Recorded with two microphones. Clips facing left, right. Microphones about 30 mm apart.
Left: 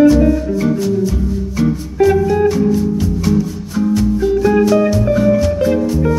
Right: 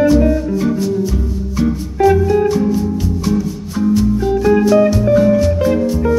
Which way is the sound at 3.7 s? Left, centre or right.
Centre.